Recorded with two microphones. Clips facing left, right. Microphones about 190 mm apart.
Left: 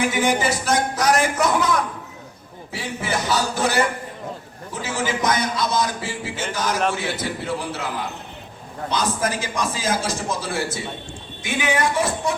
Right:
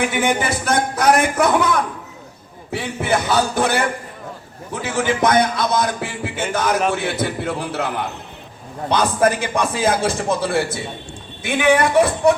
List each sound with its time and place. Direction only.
0.1 s a man's voice: 60° right (ahead or behind)